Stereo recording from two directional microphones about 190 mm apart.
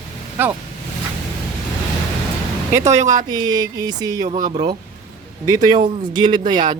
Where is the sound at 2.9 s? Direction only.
40° right (ahead or behind).